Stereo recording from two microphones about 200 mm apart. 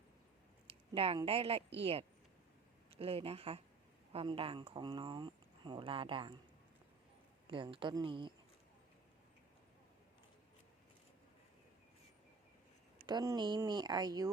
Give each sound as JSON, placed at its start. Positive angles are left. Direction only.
{"t": 0.7, "sound": "speech", "side_deg": -30}
{"t": 7.4, "sound": "speech", "side_deg": -25}
{"t": 13.1, "sound": "speech", "side_deg": -20}